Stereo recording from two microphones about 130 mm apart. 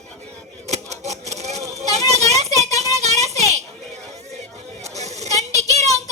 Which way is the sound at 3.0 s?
55° right (ahead or behind).